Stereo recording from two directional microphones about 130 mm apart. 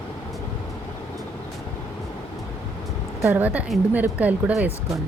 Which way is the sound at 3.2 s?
15° right (ahead or behind).